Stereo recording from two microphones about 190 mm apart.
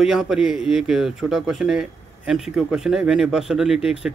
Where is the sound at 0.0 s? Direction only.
Centre (ahead or behind).